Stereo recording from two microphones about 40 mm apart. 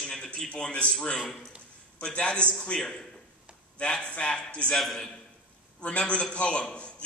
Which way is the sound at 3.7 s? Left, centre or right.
Left.